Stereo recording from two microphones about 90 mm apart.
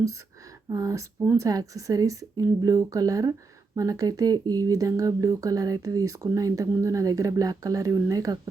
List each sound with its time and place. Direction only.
0.7 s speech: 35° right (ahead or behind)